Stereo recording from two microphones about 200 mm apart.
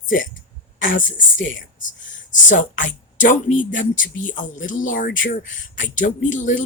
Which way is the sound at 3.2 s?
40° left (ahead or behind).